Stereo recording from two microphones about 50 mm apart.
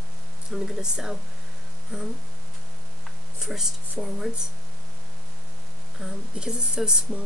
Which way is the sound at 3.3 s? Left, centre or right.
Centre.